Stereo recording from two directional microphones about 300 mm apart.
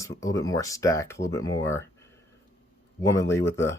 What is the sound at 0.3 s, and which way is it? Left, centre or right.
Speech, centre.